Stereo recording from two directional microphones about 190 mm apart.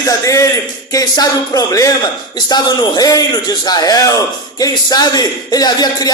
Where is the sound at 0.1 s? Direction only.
15° left (ahead or behind).